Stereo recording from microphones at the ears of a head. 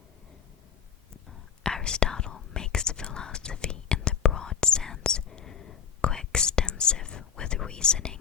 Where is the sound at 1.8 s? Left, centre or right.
Left.